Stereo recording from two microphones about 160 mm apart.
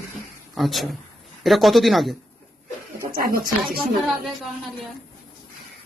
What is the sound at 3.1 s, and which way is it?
Speech, 65° right (ahead or behind).